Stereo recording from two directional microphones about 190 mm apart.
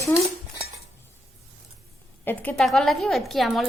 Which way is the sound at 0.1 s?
15° left (ahead or behind).